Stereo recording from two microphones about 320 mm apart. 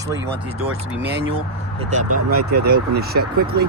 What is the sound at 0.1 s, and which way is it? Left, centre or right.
Speech, right.